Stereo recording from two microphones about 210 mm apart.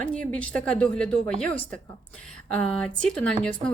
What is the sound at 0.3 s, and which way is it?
Speech, 5° left (ahead or behind).